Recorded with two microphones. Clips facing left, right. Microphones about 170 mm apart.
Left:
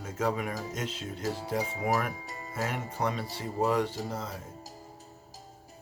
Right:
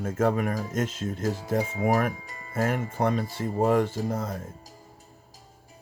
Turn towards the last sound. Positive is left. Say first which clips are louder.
# right 6 dB
turn(degrees=-50)  # may be behind; listen again after turning